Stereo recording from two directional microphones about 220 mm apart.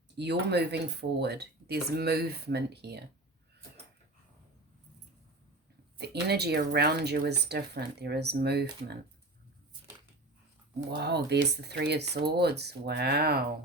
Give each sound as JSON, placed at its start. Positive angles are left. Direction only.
{"t": 0.2, "sound": "speech", "side_deg": -50}
{"t": 6.0, "sound": "speech", "side_deg": -45}
{"t": 10.9, "sound": "speech", "side_deg": -50}